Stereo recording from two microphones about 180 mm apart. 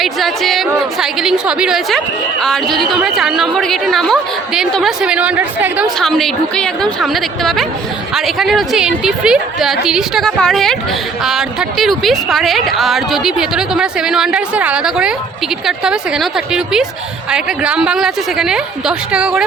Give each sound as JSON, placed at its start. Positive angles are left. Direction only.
{"t": 0.0, "sound": "a woman's voice", "side_deg": 0}